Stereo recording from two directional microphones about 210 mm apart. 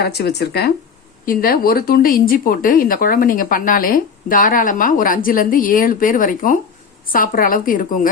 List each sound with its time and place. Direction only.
0.0 s speech: 50° left (ahead or behind)